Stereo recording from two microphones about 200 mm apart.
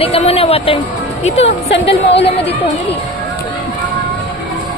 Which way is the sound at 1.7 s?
60° left (ahead or behind).